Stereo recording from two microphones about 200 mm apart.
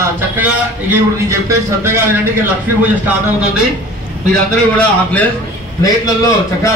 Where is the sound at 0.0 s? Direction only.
10° right (ahead or behind).